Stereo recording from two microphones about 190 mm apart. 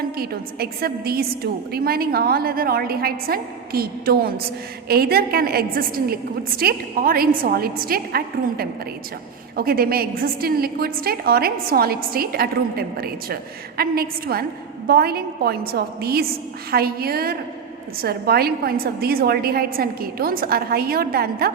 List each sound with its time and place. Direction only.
0.2 s a woman's voice: 55° right (ahead or behind)